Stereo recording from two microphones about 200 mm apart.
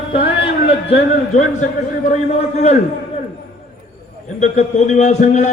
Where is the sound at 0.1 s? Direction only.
30° left (ahead or behind).